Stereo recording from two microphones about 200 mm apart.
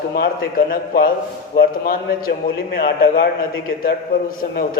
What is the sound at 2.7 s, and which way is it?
Speech, 45° left (ahead or behind).